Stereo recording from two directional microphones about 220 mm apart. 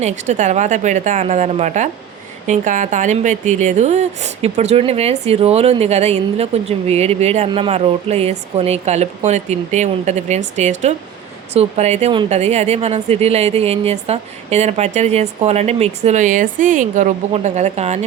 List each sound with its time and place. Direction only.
0.0 s a woman's voice: 35° right (ahead or behind)